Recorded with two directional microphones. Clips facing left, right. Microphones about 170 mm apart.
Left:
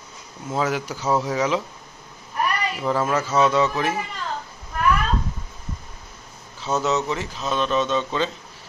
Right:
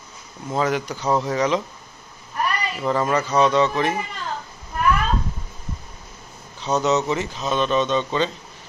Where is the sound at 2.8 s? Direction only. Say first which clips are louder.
Right 2 dB; 5° left (ahead or behind).